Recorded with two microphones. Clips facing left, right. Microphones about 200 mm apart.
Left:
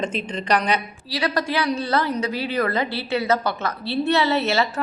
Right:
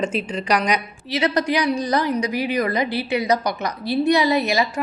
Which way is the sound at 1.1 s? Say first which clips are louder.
Right 4 dB; 20° right (ahead or behind).